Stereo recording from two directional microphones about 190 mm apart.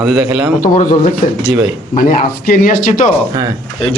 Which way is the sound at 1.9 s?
45° left (ahead or behind).